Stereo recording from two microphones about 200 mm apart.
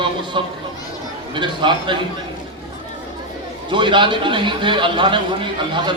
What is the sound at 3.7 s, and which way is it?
A man's voice, 25° right (ahead or behind).